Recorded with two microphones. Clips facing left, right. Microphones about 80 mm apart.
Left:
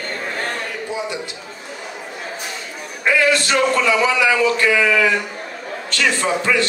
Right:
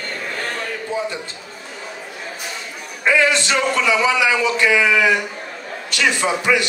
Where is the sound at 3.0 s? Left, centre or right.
Right.